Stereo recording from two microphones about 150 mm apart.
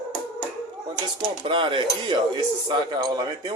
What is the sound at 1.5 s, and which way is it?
Speech, 35° right (ahead or behind).